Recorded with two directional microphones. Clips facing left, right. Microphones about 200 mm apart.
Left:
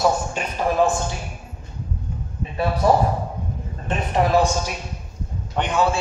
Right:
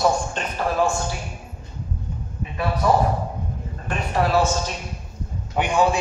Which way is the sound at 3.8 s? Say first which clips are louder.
Left 2 dB; 20° left (ahead or behind).